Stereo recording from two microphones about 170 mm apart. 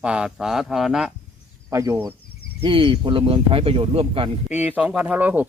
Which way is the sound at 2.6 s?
30° right (ahead or behind).